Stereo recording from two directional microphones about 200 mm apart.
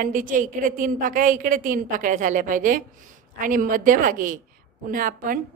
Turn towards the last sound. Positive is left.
turn(degrees=-45)  # may be behind; listen again after turning